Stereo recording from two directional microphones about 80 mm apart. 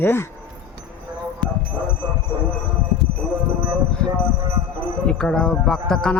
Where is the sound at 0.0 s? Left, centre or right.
Left.